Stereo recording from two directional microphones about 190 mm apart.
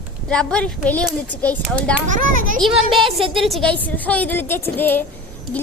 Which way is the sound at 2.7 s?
25° right (ahead or behind).